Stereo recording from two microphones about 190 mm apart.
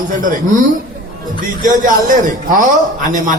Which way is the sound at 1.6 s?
45° right (ahead or behind).